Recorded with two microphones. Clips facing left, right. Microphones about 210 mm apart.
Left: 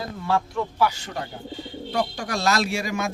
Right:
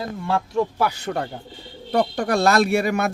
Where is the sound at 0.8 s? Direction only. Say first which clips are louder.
Right 2 dB; 55° right (ahead or behind).